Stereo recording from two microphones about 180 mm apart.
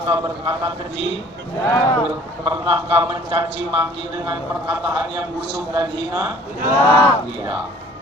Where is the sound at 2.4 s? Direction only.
25° right (ahead or behind).